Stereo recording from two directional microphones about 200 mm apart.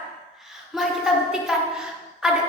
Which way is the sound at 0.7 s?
Centre (ahead or behind).